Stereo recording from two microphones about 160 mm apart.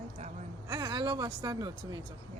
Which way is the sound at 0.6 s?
25° right (ahead or behind).